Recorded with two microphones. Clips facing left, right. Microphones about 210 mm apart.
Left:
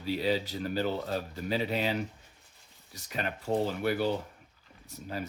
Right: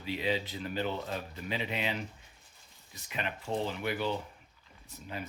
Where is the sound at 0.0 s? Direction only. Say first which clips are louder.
Left 3 dB; 40° left (ahead or behind).